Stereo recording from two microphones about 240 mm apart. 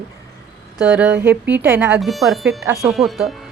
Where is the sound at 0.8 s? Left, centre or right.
Centre.